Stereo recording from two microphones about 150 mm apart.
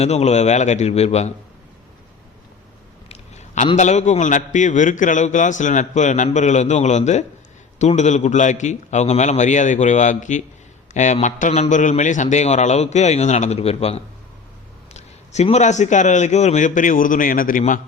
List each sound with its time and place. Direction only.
0.0 s a man's voice: 45° left (ahead or behind)
3.1 s a sound: 50° left (ahead or behind)
3.8 s a man's voice: 50° left (ahead or behind)